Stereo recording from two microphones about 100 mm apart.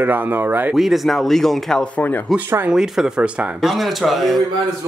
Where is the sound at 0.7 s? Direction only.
Centre (ahead or behind).